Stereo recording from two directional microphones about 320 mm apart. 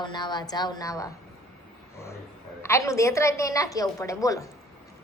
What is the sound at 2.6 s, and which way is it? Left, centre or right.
A woman's voice, centre.